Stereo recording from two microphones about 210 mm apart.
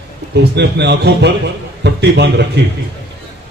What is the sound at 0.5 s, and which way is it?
A man's voice, 55° right (ahead or behind).